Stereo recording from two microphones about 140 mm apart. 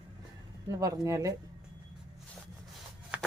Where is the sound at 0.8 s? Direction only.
25° right (ahead or behind).